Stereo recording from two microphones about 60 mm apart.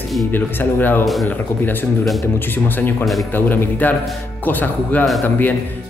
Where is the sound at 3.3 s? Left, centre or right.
Left.